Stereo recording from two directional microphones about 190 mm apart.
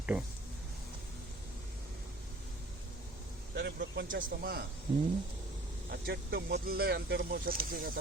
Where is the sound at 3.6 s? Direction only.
60° right (ahead or behind).